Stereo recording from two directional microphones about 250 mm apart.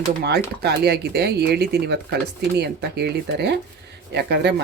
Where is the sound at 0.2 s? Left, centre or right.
Right.